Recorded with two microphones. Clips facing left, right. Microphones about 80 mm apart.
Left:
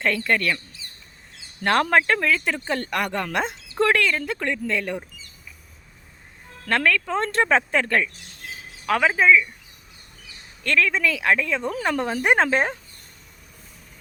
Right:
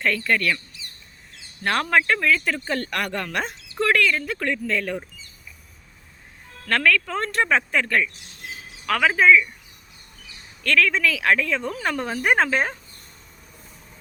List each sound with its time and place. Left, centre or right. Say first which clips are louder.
0.0 s speech: even; left
6.7 s speech: even; left
8.9 s speech: right 1 dB; left
10.6 s speech: right 1 dB; left